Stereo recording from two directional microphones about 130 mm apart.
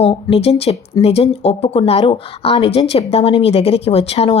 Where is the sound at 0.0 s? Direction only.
50° left (ahead or behind).